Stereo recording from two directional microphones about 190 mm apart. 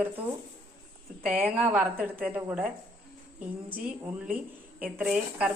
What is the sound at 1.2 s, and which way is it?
A woman's voice, 5° right (ahead or behind).